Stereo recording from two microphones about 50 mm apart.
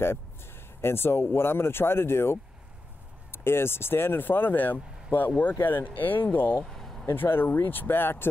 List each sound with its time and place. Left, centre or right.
0.0 s speech: left
6.3 s speech: left
6.6 s vehicle: centre
7.1 s speech: left